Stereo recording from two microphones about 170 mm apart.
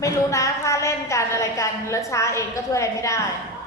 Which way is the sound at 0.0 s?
20° left (ahead or behind).